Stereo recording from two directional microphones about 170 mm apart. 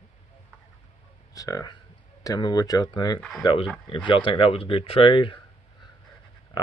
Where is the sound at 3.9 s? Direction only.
30° left (ahead or behind).